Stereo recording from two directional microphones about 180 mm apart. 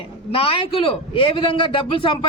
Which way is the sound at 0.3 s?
30° left (ahead or behind).